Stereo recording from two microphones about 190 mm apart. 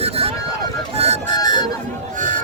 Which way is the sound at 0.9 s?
35° right (ahead or behind).